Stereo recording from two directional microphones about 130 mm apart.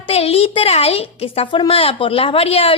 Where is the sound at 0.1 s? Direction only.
50° left (ahead or behind).